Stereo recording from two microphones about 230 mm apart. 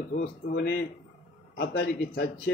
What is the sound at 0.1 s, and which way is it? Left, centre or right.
A man's voice, left.